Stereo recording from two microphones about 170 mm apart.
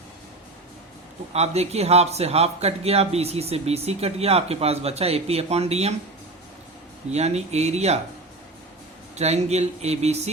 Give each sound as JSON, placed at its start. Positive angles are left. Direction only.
{"t": 1.3, "sound": "a man's voice", "side_deg": -40}
{"t": 7.1, "sound": "a man's voice", "side_deg": -40}
{"t": 9.1, "sound": "a man's voice", "side_deg": -40}